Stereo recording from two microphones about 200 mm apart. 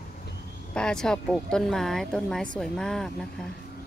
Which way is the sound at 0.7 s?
5° left (ahead or behind).